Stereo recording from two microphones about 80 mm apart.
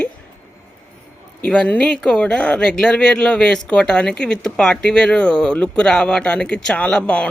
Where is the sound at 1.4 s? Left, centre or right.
Centre.